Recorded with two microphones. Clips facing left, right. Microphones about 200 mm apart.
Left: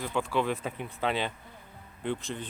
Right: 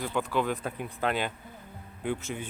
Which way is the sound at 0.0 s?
Centre (ahead or behind).